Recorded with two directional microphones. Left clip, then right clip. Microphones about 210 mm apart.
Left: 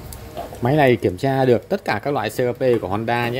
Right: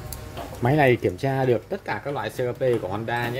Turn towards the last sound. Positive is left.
turn(degrees=35)  # may be behind; listen again after turning